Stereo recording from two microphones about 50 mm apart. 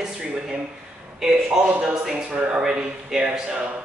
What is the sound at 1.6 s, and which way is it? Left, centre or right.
A man's voice, right.